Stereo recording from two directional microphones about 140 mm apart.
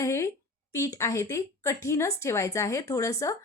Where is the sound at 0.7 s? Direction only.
25° left (ahead or behind).